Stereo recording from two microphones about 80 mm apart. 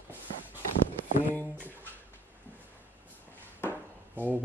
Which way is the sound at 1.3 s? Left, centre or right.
Left.